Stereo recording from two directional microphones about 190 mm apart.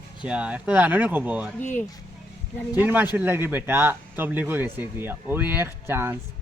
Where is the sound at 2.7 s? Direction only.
10° right (ahead or behind).